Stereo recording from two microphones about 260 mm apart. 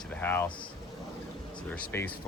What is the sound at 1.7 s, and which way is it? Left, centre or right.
Speech, centre.